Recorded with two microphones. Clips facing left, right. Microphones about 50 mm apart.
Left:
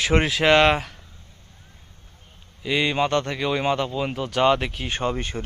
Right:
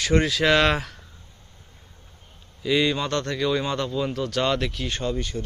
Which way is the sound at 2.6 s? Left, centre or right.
Centre.